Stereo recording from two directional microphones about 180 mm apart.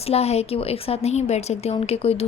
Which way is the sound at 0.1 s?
35° left (ahead or behind).